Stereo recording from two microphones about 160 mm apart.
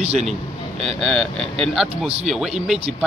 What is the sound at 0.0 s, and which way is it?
Speech, 40° right (ahead or behind).